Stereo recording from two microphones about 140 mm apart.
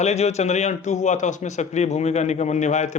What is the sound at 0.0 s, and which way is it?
A man's voice, 50° left (ahead or behind).